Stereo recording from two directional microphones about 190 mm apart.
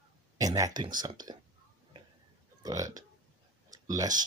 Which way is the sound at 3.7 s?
20° right (ahead or behind).